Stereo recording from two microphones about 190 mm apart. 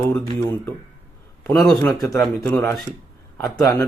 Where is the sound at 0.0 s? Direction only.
10° left (ahead or behind).